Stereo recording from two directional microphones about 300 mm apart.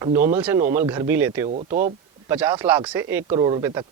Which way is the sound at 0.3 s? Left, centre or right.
Centre.